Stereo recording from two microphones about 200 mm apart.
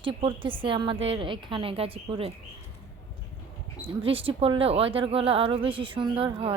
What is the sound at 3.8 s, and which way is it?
A woman's voice, 25° right (ahead or behind).